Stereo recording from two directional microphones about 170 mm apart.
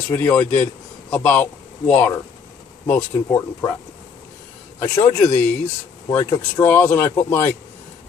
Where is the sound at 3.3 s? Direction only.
15° left (ahead or behind).